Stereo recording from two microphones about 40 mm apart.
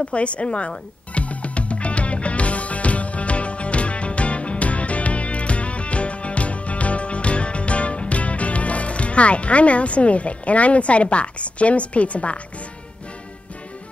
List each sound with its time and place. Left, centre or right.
0.1 s music: left